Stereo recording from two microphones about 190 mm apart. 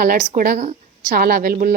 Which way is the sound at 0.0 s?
45° right (ahead or behind).